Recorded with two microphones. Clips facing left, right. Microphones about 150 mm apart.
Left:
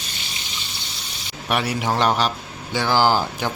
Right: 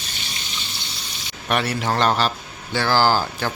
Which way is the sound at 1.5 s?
10° left (ahead or behind).